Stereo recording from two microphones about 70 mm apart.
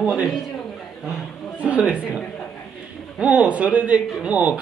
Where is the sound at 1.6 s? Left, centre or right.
Centre.